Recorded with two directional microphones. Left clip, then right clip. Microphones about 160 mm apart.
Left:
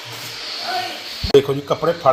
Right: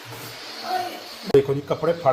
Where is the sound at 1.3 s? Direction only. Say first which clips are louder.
Left 4 dB; 30° left (ahead or behind).